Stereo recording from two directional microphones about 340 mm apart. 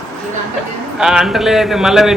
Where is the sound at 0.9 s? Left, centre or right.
Centre.